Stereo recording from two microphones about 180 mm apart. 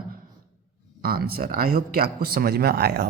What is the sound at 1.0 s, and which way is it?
Speech, 55° right (ahead or behind).